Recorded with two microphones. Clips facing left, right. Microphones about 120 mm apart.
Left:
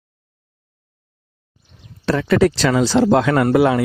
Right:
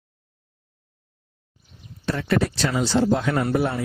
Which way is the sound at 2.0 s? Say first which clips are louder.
Left 8 dB; 90° left.